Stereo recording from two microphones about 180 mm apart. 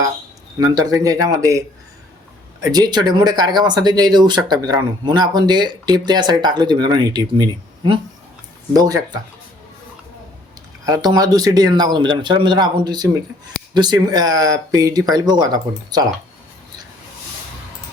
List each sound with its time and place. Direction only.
0.6 s speech: 20° right (ahead or behind)
10.8 s speech: 20° right (ahead or behind)